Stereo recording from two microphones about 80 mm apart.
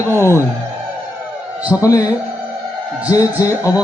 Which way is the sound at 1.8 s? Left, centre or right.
Left.